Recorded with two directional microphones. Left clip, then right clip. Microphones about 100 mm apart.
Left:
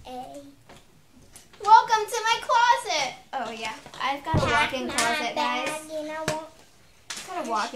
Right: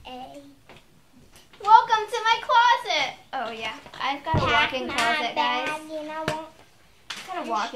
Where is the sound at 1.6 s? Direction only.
10° right (ahead or behind).